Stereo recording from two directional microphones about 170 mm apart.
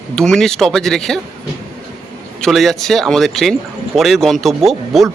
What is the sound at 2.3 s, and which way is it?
Speech, centre (ahead or behind).